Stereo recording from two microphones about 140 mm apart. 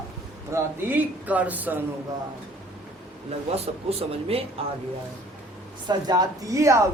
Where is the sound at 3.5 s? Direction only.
45° right (ahead or behind).